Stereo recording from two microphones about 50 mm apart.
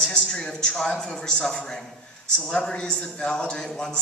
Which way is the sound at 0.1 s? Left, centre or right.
Centre.